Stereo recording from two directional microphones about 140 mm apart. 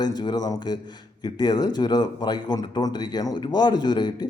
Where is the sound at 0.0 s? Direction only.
30° left (ahead or behind).